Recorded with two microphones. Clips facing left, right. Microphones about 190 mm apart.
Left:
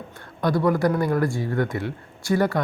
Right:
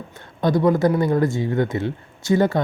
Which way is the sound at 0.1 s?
20° right (ahead or behind).